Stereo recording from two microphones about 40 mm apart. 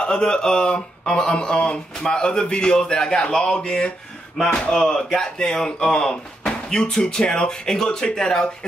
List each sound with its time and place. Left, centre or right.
0.0 s speech: left
4.4 s speech: centre